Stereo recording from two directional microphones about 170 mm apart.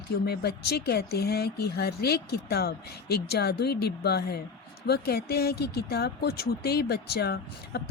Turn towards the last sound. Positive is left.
turn(degrees=70)  # may be behind; listen again after turning